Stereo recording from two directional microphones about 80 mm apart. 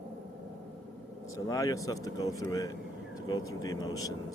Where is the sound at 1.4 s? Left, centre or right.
Left.